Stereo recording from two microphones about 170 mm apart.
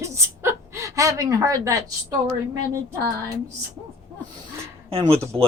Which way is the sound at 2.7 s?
15° right (ahead or behind).